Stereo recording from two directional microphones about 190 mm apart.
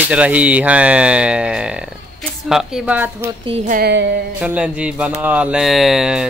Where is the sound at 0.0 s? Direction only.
5° right (ahead or behind).